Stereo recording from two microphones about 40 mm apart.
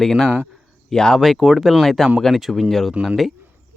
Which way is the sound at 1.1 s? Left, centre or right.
Centre.